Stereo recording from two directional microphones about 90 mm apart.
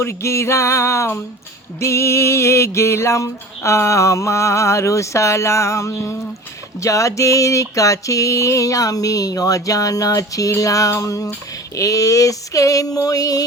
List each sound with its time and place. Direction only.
0.0 s music: 30° left (ahead or behind)